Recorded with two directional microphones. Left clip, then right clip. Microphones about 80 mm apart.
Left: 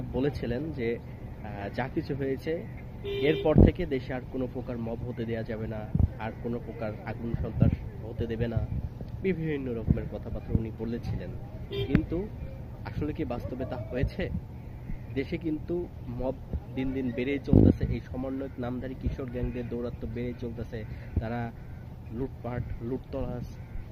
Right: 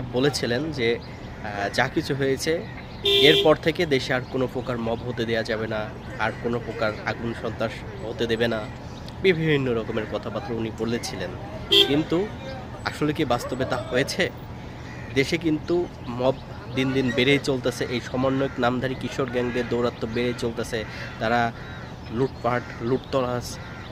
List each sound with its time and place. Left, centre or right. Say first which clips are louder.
0.1 s speech: right 8 dB; right
12.8 s speech: right 10 dB; right
16.7 s speech: right 10 dB; right